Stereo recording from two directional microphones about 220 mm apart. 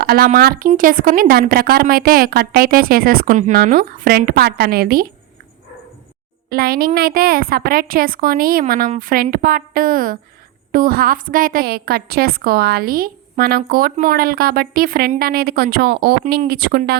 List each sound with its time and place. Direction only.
0.0 s a woman's voice: 40° right (ahead or behind)
6.5 s a woman's voice: 45° right (ahead or behind)